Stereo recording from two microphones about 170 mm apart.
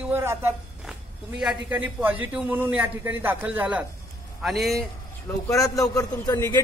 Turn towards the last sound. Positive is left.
turn(degrees=15)  # may be behind; listen again after turning